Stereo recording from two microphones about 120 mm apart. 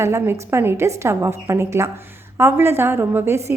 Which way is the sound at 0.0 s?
20° right (ahead or behind).